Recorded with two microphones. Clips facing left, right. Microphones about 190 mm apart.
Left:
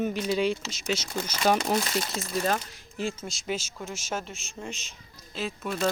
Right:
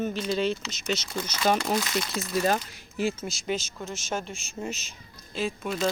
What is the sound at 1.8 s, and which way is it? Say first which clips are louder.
Speech: even; 30° left (ahead or behind).